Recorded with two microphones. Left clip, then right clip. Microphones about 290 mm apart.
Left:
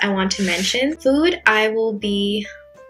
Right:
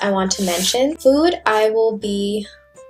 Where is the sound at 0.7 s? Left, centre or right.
Centre.